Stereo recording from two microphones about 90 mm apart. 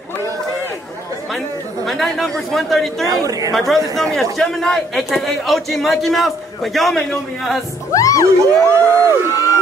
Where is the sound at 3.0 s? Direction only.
40° right (ahead or behind).